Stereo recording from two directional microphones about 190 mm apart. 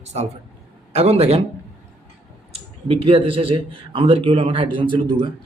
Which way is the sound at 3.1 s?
30° right (ahead or behind).